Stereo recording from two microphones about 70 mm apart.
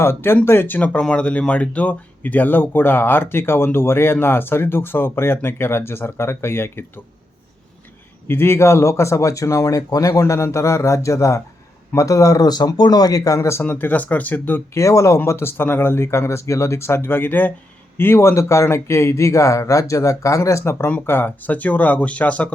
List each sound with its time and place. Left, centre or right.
0.0 s speech: left
1.1 s speech: centre; by 7.0 s left
8.3 s speech: left
13.7 s speech: left
14.7 s speech: left
15.2 s speech: left; by 22.5 s centre